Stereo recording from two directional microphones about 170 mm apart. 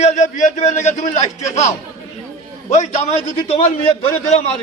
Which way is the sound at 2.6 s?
40° left (ahead or behind).